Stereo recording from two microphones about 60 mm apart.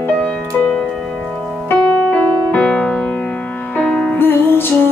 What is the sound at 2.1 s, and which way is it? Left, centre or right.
Music, centre.